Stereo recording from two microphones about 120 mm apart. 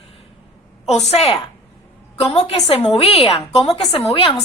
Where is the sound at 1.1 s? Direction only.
60° left (ahead or behind).